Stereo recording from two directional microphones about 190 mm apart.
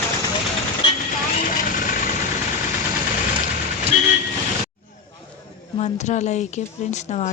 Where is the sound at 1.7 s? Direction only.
45° left (ahead or behind).